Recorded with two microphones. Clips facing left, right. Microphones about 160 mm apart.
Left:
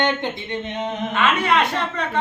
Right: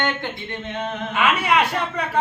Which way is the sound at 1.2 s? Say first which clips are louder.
Even; 10° right (ahead or behind).